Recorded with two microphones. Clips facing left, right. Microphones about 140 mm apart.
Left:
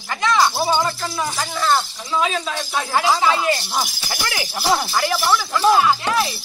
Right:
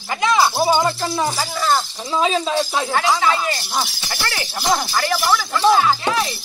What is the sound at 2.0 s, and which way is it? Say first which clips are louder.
Speech: right 5 dB; 30° right (ahead or behind).